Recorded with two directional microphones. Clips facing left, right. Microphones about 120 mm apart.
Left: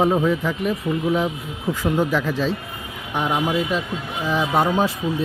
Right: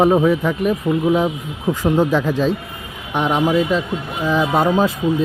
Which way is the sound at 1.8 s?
40° right (ahead or behind).